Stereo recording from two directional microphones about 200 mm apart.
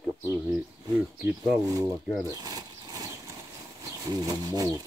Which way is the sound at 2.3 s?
20° right (ahead or behind).